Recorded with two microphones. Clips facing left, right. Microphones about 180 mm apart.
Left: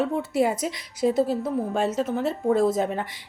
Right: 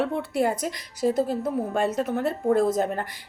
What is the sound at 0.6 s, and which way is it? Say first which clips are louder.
Speech: left 1 dB; 45° right (ahead or behind).